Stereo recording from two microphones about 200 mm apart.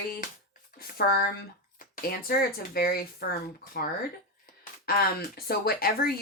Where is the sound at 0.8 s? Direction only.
50° left (ahead or behind).